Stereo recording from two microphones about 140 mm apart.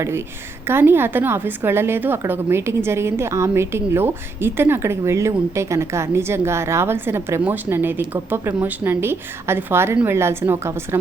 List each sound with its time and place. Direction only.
0.7 s a woman's voice: 15° right (ahead or behind)